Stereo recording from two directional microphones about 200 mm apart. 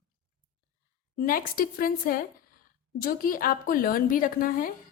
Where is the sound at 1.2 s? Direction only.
45° left (ahead or behind).